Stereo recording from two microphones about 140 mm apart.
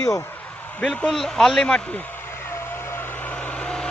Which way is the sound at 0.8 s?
5° left (ahead or behind).